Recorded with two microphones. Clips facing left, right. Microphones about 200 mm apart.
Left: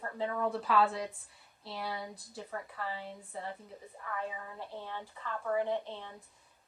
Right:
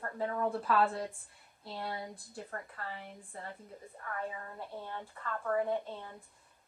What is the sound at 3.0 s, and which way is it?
Speech, 30° left (ahead or behind).